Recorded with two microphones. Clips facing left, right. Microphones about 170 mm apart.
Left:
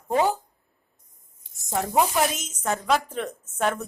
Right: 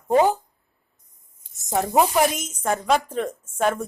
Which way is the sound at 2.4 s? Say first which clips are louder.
Right 3 dB; 10° right (ahead or behind).